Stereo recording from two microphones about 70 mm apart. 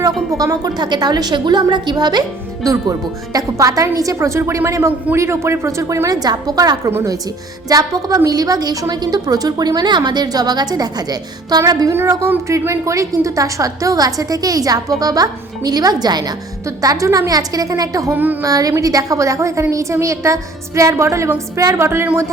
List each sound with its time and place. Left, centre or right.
0.0 s a woman's voice: right
0.8 s a woman's voice: right
3.3 s a woman's voice: right
6.1 s a woman's voice: right
11.9 s a woman's voice: right
16.6 s a woman's voice: right
18.1 s a sound: right
18.4 s a woman's voice: right